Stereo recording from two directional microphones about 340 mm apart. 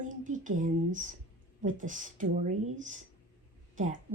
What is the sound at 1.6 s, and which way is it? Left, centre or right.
Speech, right.